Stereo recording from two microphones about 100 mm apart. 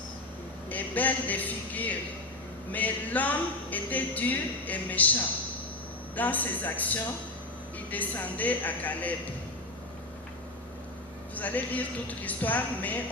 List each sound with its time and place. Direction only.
0.7 s a man's voice: 15° left (ahead or behind)
11.3 s speech: 15° left (ahead or behind)